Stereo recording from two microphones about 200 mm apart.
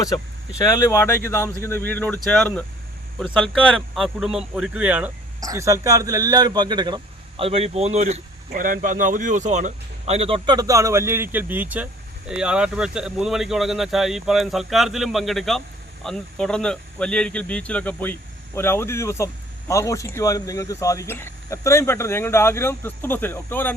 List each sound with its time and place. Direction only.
0.8 s speech: 15° left (ahead or behind)